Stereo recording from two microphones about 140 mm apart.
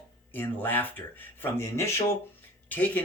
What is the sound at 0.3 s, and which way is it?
Speech, 15° left (ahead or behind).